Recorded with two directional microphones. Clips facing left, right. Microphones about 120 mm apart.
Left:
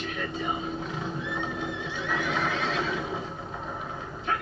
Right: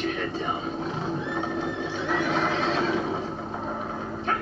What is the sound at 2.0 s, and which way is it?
Horse, 30° right (ahead or behind).